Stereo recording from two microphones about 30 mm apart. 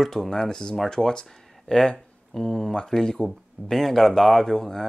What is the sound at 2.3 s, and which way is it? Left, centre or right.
Speech, centre.